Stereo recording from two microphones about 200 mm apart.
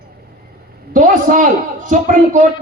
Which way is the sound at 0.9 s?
40° right (ahead or behind).